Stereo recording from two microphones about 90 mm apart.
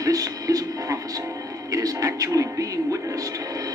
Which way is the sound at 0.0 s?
40° right (ahead or behind).